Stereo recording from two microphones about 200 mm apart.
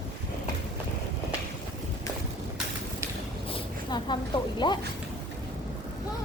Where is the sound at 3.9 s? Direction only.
20° left (ahead or behind).